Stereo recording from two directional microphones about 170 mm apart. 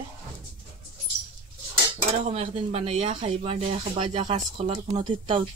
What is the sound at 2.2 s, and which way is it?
Speech, 40° right (ahead or behind).